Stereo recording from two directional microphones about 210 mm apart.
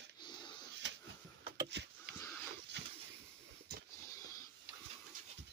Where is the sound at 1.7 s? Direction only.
55° right (ahead or behind).